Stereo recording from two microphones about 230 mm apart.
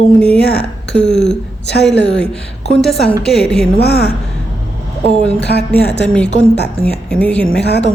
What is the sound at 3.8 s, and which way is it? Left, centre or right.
Speech, left.